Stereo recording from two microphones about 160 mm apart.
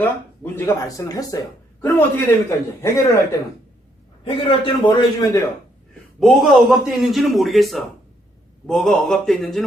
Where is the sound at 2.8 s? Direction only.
20° left (ahead or behind).